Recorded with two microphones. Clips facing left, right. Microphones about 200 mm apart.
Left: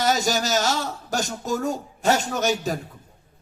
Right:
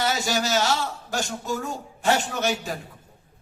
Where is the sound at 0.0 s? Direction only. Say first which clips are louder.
Left 3 dB; 40° left (ahead or behind).